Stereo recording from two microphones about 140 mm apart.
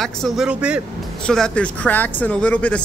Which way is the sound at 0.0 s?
Centre (ahead or behind).